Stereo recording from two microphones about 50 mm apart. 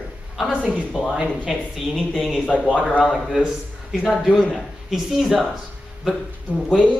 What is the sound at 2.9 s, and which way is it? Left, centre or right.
Speech, left.